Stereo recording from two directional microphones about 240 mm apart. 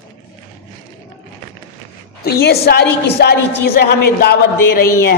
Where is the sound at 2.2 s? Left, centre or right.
Left.